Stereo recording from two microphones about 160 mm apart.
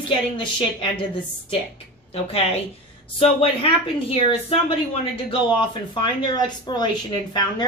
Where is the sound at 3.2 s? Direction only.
35° left (ahead or behind).